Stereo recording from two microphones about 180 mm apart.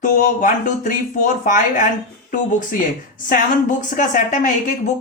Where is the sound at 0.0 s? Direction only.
45° left (ahead or behind).